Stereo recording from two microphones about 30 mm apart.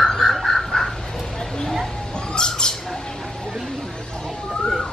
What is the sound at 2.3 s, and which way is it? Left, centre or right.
Squawk, left.